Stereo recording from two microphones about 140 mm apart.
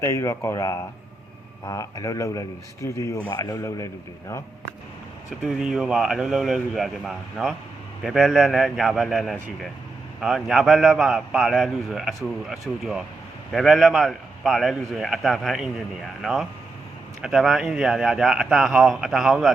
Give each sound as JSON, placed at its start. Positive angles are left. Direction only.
{"t": 0.0, "sound": "speech", "side_deg": 20}
{"t": 5.4, "sound": "a man's voice", "side_deg": -5}